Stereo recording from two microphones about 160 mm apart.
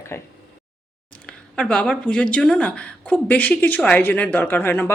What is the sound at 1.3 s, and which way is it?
Speech, 5° left (ahead or behind).